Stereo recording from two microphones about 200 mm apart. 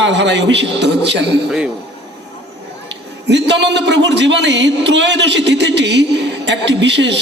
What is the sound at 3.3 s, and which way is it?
A woman's voice, 60° right (ahead or behind).